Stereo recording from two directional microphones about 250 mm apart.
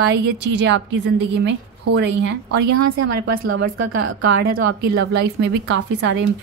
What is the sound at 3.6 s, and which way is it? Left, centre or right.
Speech, right.